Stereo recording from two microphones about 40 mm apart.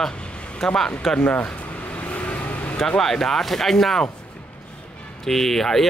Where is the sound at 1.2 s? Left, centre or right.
Left.